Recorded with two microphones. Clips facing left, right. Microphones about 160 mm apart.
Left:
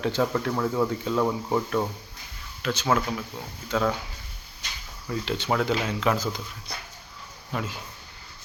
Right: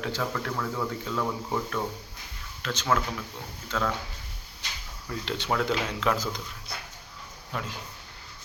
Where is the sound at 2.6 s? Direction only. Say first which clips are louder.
Left 3 dB; 10° left (ahead or behind).